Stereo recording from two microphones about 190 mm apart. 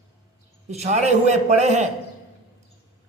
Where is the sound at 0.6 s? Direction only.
35° right (ahead or behind).